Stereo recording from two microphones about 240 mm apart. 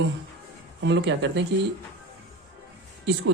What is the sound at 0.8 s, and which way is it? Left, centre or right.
Speech, right.